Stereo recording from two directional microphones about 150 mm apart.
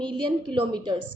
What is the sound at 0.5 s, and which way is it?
Speech, 30° right (ahead or behind).